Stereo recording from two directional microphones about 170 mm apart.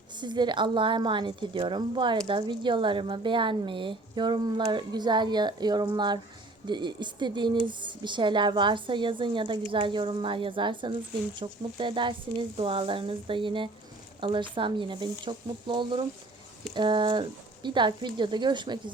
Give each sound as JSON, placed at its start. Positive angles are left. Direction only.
{"t": 0.2, "sound": "a woman's voice", "side_deg": -25}